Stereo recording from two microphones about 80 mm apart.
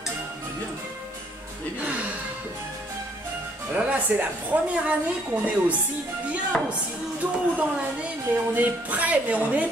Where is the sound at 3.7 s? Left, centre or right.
Centre.